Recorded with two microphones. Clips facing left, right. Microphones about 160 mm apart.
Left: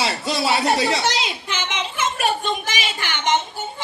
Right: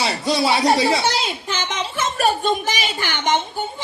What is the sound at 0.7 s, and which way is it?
Speech, 40° right (ahead or behind).